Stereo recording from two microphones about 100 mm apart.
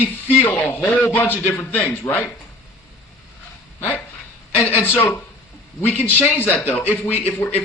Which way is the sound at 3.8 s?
20° left (ahead or behind).